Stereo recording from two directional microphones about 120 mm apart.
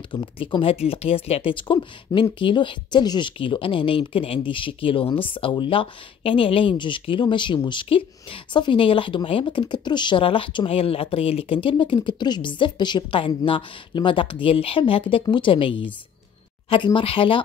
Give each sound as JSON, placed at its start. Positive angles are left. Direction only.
{"t": 0.1, "sound": "speech", "side_deg": 45}